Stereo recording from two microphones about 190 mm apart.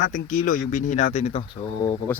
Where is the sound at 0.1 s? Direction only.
45° left (ahead or behind).